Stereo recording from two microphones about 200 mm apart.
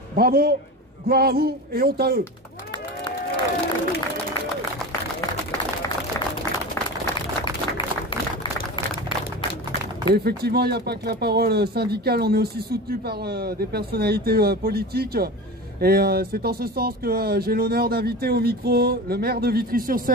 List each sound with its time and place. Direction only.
0.1 s speech: 50° right (ahead or behind)
7.4 s a sound: 25° left (ahead or behind)
10.1 s speech: 50° right (ahead or behind)